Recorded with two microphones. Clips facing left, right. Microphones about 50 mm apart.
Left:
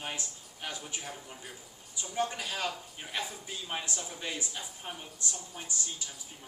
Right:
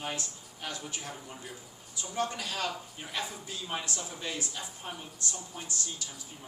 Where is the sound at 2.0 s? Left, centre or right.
Centre.